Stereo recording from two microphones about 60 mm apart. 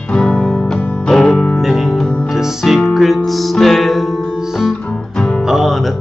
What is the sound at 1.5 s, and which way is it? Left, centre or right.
Music, centre.